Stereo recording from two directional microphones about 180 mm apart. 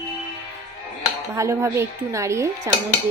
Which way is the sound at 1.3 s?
15° right (ahead or behind).